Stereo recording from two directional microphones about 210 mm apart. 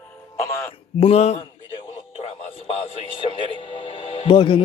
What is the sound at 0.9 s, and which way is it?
Speech, 30° left (ahead or behind).